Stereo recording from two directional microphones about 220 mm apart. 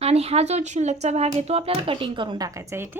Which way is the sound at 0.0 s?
30° right (ahead or behind).